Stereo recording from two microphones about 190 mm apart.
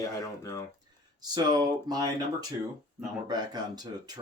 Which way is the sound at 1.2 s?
20° right (ahead or behind).